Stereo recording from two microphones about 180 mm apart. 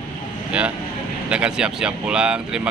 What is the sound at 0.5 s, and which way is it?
Speech, 5° right (ahead or behind).